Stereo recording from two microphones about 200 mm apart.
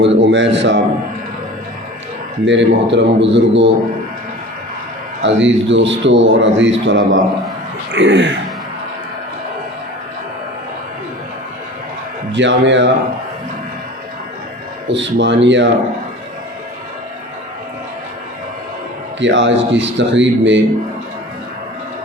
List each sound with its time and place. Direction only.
0.0 s a man's voice: 65° right (ahead or behind)
2.4 s a man's voice: 65° right (ahead or behind)
5.2 s a man's voice: 65° right (ahead or behind)
12.3 s a man's voice: 65° right (ahead or behind)
14.8 s a man's voice: 65° right (ahead or behind)
19.2 s a man's voice: 65° right (ahead or behind)